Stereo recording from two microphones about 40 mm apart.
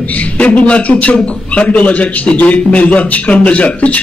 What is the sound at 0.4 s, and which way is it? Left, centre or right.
A man's voice, left.